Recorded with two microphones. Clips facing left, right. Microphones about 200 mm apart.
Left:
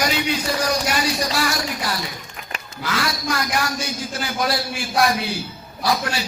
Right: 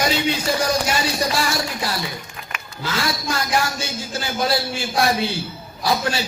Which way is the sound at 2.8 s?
25° right (ahead or behind).